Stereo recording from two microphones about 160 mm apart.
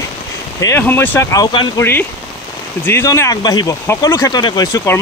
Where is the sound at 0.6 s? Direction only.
15° left (ahead or behind).